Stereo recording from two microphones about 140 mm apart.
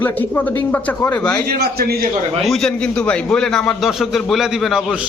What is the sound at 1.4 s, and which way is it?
Speech, 90° right.